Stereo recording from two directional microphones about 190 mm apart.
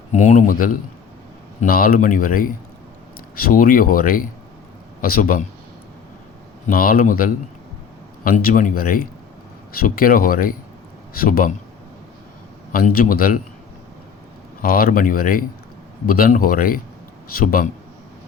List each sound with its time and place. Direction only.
0.1 s speech: 40° left (ahead or behind)
6.7 s speech: 50° left (ahead or behind)
12.7 s speech: 50° left (ahead or behind)
14.6 s speech: 50° left (ahead or behind)